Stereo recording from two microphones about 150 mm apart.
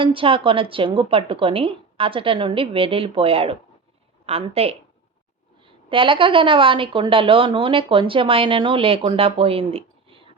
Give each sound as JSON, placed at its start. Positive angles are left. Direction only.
{"t": 0.0, "sound": "a woman's voice", "side_deg": -35}